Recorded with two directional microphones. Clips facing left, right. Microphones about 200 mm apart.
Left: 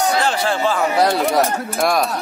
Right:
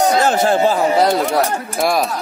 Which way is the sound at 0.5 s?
40° right (ahead or behind).